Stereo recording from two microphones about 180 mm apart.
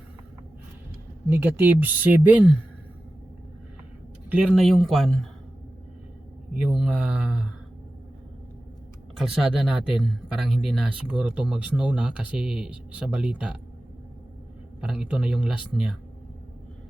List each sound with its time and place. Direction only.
1.3 s speech: 10° right (ahead or behind)
4.3 s speech: 5° right (ahead or behind)
6.6 s speech: 5° right (ahead or behind)
9.1 s speech: centre (ahead or behind)
14.8 s speech: 5° right (ahead or behind)